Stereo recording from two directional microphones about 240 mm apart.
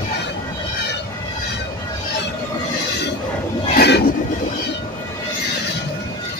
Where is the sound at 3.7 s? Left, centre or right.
Left.